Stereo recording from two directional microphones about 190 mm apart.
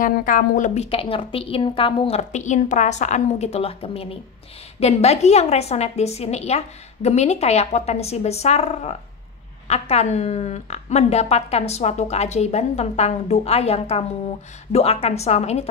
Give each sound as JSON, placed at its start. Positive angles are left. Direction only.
{"t": 0.0, "sound": "speech", "side_deg": 45}
{"t": 0.8, "sound": "a woman's voice", "side_deg": 30}